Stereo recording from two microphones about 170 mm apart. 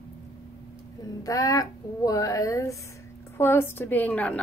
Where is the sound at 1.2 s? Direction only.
20° left (ahead or behind).